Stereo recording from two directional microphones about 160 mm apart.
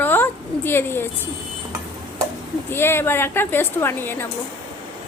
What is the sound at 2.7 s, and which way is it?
A woman's voice, 15° left (ahead or behind).